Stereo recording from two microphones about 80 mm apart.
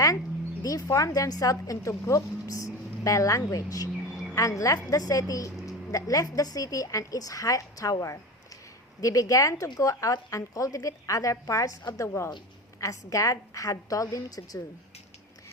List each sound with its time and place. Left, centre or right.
0.6 s a woman's voice: left